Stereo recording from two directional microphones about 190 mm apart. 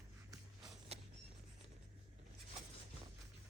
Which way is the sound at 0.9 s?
35° right (ahead or behind).